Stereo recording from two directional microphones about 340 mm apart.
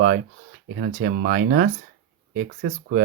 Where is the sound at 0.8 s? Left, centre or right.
Right.